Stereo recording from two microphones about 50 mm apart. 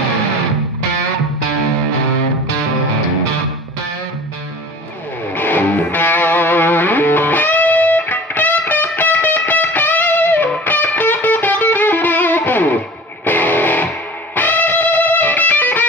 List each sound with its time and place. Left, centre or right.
5.3 s music: left